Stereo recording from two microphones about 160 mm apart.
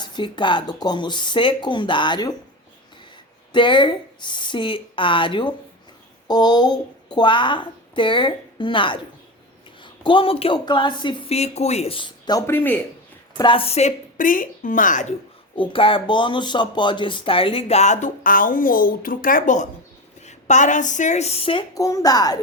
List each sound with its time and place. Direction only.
0.0 s speech: 30° left (ahead or behind)
3.5 s speech: 30° left (ahead or behind); by 12.8 s 15° left (ahead or behind)
13.3 s a woman's voice: 30° left (ahead or behind); by 15.0 s 55° left (ahead or behind)
15.5 s a woman's voice: 30° left (ahead or behind)
21.8 s speech: 20° left (ahead or behind)